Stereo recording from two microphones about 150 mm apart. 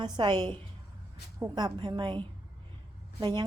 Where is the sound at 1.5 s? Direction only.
30° right (ahead or behind).